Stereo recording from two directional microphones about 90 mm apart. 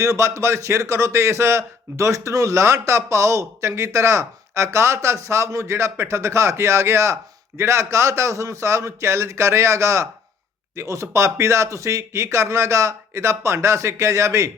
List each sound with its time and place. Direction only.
0.0 s a man's voice: 35° right (ahead or behind)